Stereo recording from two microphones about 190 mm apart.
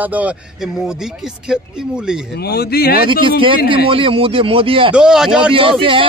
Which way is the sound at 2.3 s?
55° left (ahead or behind).